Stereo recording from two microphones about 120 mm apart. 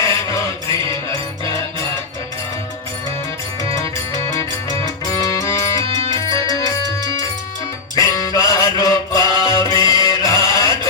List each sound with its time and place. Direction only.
0.0 s music: 25° left (ahead or behind)
5.1 s music: 25° left (ahead or behind)